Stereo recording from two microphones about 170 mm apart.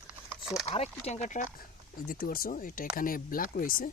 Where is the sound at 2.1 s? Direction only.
60° left (ahead or behind).